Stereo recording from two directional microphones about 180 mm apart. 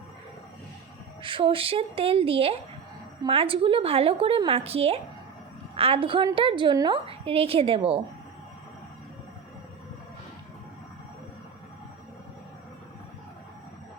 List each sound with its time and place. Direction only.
1.2 s a woman's voice: 30° right (ahead or behind)